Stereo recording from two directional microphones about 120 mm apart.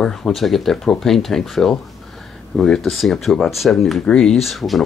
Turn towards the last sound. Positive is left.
turn(degrees=0)  # may be behind; listen again after turning